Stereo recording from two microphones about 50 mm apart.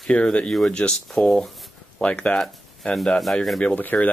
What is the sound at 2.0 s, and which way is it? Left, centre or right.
Speech, left.